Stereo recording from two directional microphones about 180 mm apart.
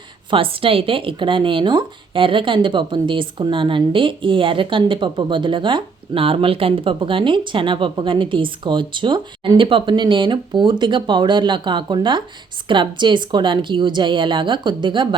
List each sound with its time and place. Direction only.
0.3 s speech: 30° right (ahead or behind)